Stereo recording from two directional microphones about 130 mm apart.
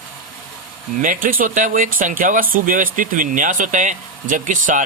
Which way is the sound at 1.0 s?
90° right.